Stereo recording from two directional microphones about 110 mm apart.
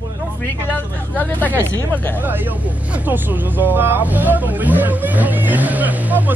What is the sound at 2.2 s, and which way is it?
Speech, 15° right (ahead or behind).